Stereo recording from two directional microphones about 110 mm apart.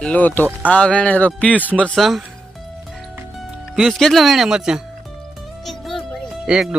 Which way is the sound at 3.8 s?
Centre (ahead or behind).